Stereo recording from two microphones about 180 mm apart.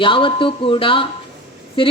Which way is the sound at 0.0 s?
30° left (ahead or behind).